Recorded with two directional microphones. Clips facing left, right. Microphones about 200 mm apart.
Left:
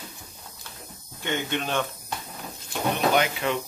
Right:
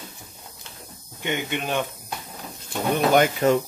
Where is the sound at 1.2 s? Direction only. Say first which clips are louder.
Right 1 dB; 15° right (ahead or behind).